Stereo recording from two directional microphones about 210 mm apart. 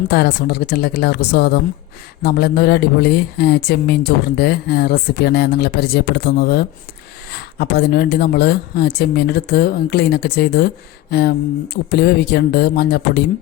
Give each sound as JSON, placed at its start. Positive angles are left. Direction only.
{"t": 0.1, "sound": "speech", "side_deg": 50}